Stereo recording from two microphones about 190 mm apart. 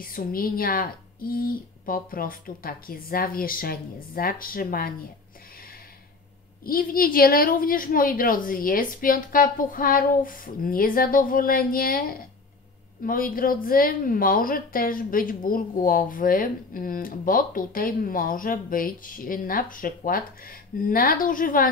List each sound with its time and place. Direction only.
0.0 s a woman's voice: 50° left (ahead or behind)
6.6 s a woman's voice: 50° left (ahead or behind)